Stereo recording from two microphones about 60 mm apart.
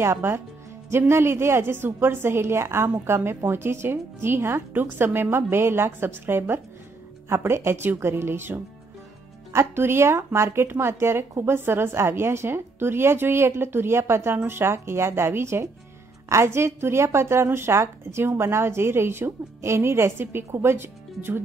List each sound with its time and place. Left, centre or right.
0.0 s a woman's voice: right